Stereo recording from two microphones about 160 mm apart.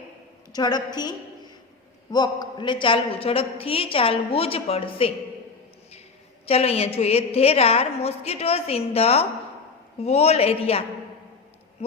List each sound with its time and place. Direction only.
0.5 s a woman's voice: 25° left (ahead or behind)
2.1 s a woman's voice: 25° left (ahead or behind)
6.4 s a woman's voice: 40° left (ahead or behind)